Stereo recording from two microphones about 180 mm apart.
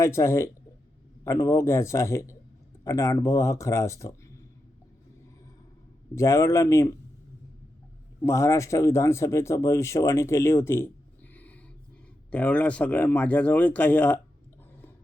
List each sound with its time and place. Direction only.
0.0 s speech: 15° left (ahead or behind)
6.1 s speech: 15° left (ahead or behind)
8.2 s speech: 15° left (ahead or behind)